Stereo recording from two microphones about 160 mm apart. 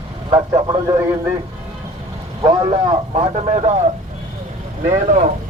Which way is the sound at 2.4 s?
35° right (ahead or behind).